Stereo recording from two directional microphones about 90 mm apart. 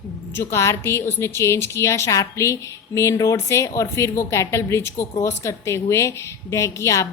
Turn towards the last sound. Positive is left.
turn(degrees=35)  # may be behind; listen again after turning